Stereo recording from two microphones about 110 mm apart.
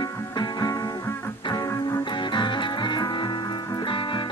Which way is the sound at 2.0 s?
45° left (ahead or behind).